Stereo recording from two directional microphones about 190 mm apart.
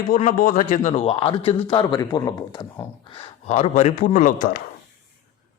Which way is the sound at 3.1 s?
30° left (ahead or behind).